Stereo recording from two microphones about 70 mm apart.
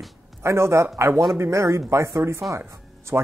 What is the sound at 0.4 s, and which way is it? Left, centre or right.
A man's voice, right.